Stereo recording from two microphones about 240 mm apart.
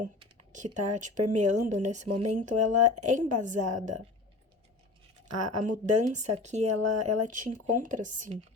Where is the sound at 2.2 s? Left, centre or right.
Right.